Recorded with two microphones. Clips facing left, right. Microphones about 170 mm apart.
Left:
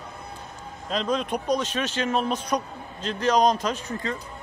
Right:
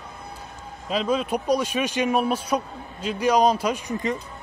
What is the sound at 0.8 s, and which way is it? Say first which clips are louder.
Speech: right 2 dB; 5° right (ahead or behind).